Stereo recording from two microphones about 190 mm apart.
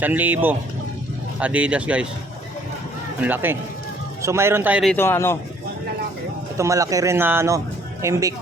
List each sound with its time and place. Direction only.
0.0 s speech: 10° right (ahead or behind)
3.2 s speech: 10° right (ahead or behind)
4.9 s a man's voice: 15° left (ahead or behind)
6.6 s speech: 15° right (ahead or behind)